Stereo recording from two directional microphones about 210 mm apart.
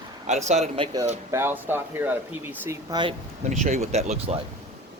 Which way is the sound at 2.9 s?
20° right (ahead or behind).